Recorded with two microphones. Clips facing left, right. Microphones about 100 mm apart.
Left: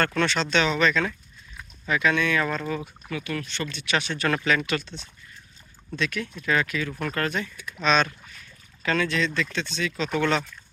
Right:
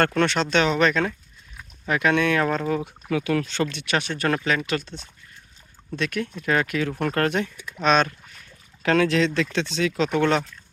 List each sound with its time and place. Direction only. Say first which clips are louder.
0.2 s speech: right 3 dB; 50° right (ahead or behind)
3.1 s speech: right 8 dB; 90° right
3.8 s speech: left 2 dB; 50° right (ahead or behind); by 7.5 s 65° right (ahead or behind)
7.8 s speech: right 3 dB; 55° right (ahead or behind)
8.8 s speech: right 5 dB; 80° right
10.2 s speech: right 2 dB; 45° right (ahead or behind)